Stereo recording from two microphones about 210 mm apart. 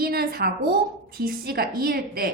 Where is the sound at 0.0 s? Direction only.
45° right (ahead or behind).